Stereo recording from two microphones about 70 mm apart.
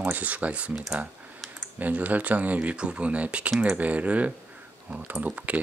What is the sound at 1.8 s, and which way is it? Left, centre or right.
Speech, right.